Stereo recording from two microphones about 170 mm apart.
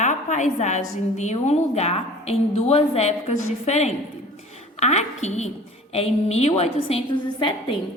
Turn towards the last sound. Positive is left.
turn(degrees=30)  # may be behind; listen again after turning